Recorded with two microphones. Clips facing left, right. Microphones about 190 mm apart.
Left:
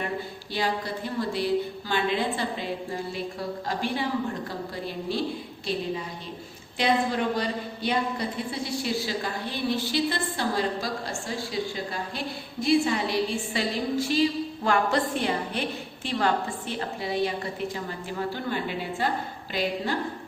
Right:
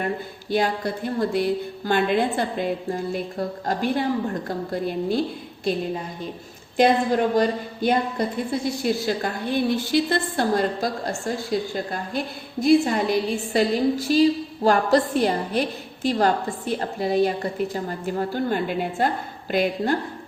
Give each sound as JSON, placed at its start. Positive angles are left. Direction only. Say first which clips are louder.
{"t": 0.5, "sound": "a woman's voice", "louder": "right 6 dB", "side_deg": -50}
{"t": 6.7, "sound": "a woman's voice", "louder": "right 6 dB", "side_deg": -45}